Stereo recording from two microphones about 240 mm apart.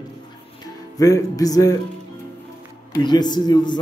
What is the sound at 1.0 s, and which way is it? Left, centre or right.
Speech, centre.